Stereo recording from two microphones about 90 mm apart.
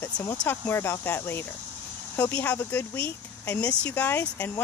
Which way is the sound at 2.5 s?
30° left (ahead or behind).